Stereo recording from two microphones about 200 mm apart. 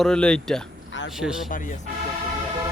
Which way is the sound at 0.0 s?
5° left (ahead or behind).